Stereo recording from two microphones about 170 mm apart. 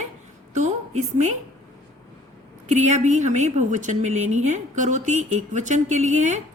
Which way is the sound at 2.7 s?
45° right (ahead or behind).